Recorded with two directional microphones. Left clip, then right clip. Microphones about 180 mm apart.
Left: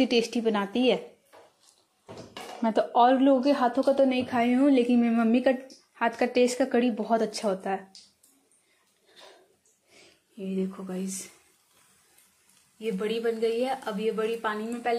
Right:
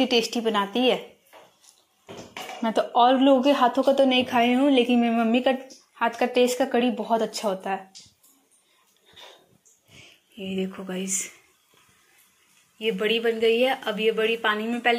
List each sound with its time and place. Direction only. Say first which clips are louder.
0.0 s a woman's voice: right 2 dB; 20° left (ahead or behind)
2.6 s a woman's voice: right 2 dB; 15° left (ahead or behind)
10.3 s speech: right 2 dB; 10° left (ahead or behind)
12.7 s speech: right 6 dB; centre (ahead or behind)